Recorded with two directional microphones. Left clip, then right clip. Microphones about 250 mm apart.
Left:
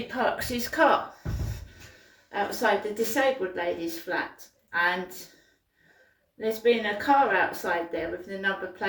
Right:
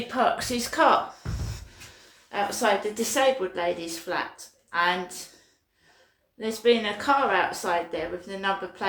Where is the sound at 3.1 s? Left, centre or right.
Centre.